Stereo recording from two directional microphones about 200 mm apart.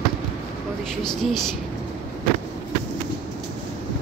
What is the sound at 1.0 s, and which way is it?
Speech, centre (ahead or behind).